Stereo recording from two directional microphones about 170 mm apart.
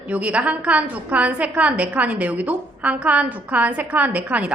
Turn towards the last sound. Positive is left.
turn(degrees=-10)  # may be behind; listen again after turning